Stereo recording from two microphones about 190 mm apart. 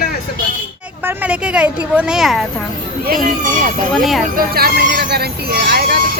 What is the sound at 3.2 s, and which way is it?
Speech, 45° right (ahead or behind).